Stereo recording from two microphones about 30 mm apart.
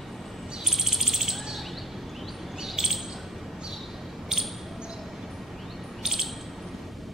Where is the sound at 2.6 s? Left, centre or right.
Centre.